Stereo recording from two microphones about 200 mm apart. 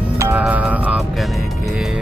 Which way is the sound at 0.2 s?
10° right (ahead or behind).